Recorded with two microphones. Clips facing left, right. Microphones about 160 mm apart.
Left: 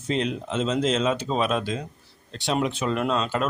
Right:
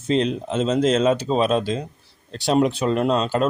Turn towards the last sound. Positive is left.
turn(degrees=-35)  # may be behind; listen again after turning